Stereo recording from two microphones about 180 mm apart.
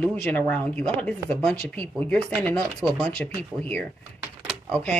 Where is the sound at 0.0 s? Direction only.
10° left (ahead or behind).